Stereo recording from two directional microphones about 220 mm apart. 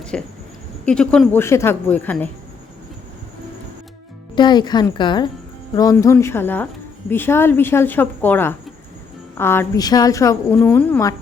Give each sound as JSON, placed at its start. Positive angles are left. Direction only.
{"t": 0.0, "sound": "a sound", "side_deg": 5}
{"t": 0.9, "sound": "a woman's voice", "side_deg": 5}
{"t": 4.4, "sound": "a woman's voice", "side_deg": 20}